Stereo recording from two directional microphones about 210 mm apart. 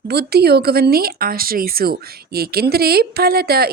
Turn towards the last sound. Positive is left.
turn(degrees=-45)  # may be behind; listen again after turning